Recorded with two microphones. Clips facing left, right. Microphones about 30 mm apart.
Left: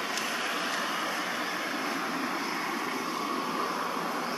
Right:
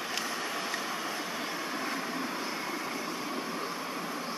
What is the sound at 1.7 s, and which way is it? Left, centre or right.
Vehicle, centre.